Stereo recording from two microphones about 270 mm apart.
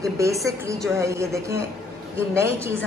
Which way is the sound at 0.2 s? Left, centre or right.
Centre.